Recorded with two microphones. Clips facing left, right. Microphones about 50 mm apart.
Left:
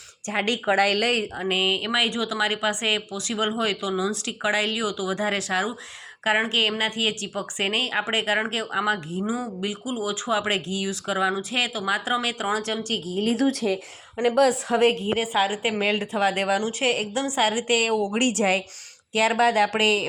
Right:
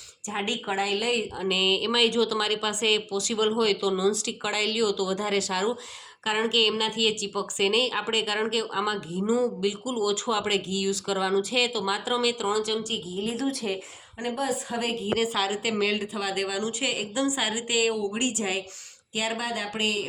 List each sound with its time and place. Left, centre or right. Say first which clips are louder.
0.3 s a woman's voice: left 6 dB; left
1.4 s speech: left 1 dB; left
13.1 s a woman's voice: left 7 dB; left
14.8 s a woman's voice: left 13 dB; left
15.1 s a woman's voice: left 3 dB; left
16.6 s speech: left 4 dB; left
16.9 s a woman's voice: left 2 dB; left
18.2 s speech: left 6 dB; left